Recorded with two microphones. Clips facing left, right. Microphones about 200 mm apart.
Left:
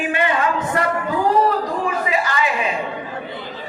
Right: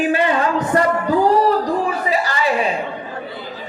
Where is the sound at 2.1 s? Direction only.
35° right (ahead or behind).